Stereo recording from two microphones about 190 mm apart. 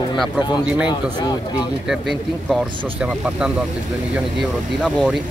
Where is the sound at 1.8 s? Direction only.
Centre (ahead or behind).